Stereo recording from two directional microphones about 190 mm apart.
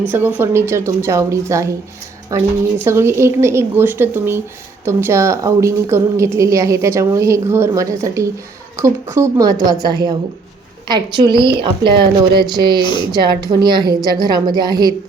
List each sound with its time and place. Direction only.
0.1 s a woman's voice: 10° right (ahead or behind)